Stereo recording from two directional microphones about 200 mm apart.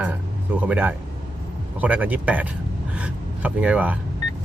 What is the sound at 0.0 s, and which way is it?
Speech, 5° right (ahead or behind).